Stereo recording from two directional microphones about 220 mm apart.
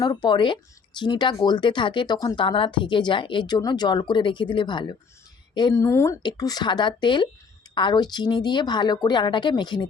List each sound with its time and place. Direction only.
0.0 s speech: 20° left (ahead or behind)